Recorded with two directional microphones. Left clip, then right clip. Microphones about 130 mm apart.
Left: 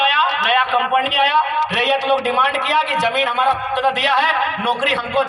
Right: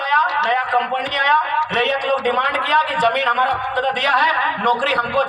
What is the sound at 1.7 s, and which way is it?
Speech, 30° right (ahead or behind).